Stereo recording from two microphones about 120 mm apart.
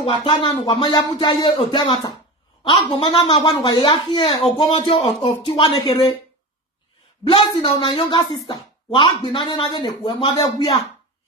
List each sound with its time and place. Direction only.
0.0 s a woman's voice: 40° left (ahead or behind)
7.2 s a woman's voice: 45° left (ahead or behind)
10.3 s speech: 35° left (ahead or behind)